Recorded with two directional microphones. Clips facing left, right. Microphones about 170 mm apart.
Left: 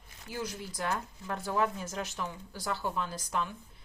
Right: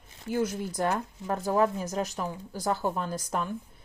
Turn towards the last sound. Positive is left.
turn(degrees=-45)  # may be behind; listen again after turning